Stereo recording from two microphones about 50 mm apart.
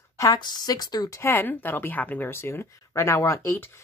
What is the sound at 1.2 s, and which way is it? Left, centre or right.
A woman's voice, left.